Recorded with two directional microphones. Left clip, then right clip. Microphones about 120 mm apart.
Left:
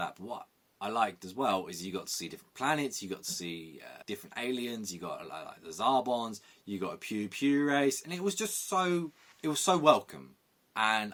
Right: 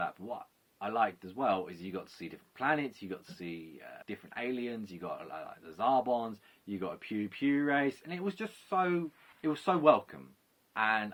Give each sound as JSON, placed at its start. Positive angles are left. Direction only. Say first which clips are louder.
{"t": 0.8, "sound": "speech", "louder": "even", "side_deg": 40}